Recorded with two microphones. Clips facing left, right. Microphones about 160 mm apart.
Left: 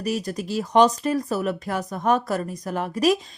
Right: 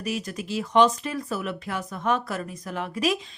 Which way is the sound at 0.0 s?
35° left (ahead or behind).